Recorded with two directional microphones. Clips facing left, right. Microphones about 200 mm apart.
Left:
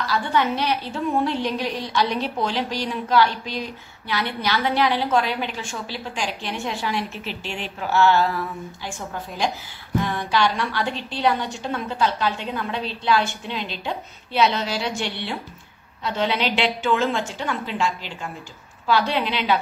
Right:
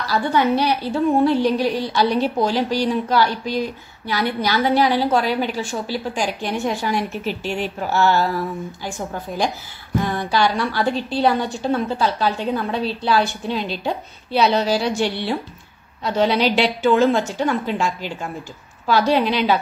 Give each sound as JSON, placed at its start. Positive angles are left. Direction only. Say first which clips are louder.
{"t": 0.1, "sound": "a woman's voice", "louder": "right 5 dB", "side_deg": -40}